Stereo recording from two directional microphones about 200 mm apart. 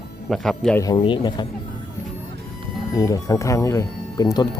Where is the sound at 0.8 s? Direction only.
20° left (ahead or behind).